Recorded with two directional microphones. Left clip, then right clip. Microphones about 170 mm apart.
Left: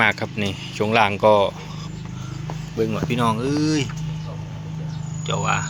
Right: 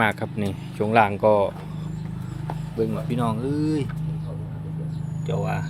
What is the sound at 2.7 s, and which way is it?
Speech, 15° left (ahead or behind).